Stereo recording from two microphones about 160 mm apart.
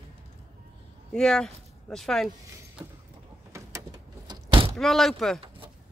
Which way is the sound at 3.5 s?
20° right (ahead or behind).